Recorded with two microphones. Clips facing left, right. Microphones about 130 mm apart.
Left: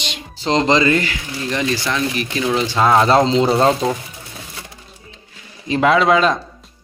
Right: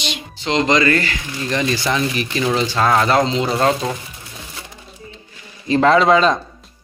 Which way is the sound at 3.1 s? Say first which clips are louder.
Left 3 dB; 25° left (ahead or behind).